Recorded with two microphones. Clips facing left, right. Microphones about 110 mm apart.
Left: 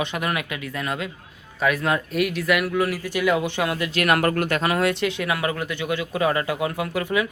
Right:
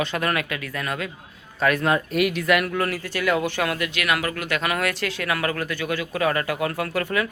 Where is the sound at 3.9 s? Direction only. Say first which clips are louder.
Left 5 dB; 45° left (ahead or behind).